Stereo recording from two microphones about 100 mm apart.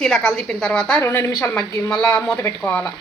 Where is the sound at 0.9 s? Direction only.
25° left (ahead or behind).